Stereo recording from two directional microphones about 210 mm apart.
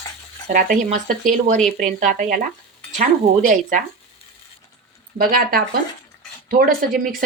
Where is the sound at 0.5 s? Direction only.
40° right (ahead or behind).